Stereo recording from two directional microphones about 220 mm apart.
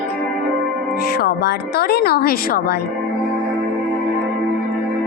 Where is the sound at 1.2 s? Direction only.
45° left (ahead or behind).